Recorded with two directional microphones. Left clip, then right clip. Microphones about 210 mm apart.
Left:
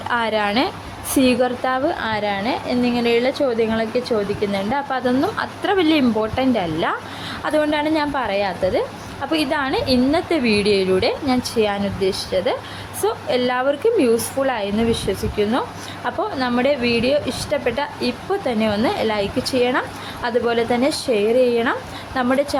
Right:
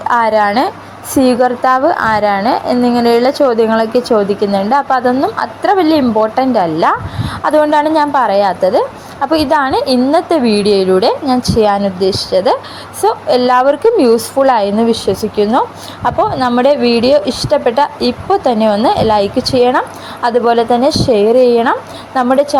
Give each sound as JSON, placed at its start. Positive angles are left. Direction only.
{"t": 0.1, "sound": "a woman's voice", "side_deg": -10}
{"t": 1.6, "sound": "speech", "side_deg": 5}
{"t": 1.9, "sound": "a woman's voice", "side_deg": -15}